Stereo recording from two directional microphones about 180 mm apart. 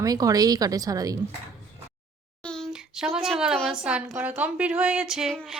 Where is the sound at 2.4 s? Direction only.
5° left (ahead or behind).